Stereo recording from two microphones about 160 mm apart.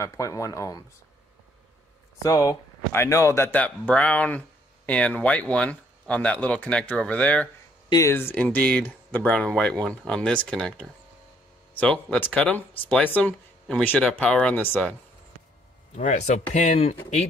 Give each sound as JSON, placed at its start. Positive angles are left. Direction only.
{"t": 0.0, "sound": "speech", "side_deg": 20}
{"t": 2.2, "sound": "speech", "side_deg": 20}
{"t": 16.0, "sound": "speech", "side_deg": 50}